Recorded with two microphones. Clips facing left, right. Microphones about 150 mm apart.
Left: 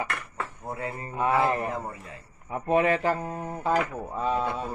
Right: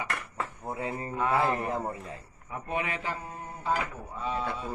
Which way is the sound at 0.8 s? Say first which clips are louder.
Right 1 dB; 15° right (ahead or behind).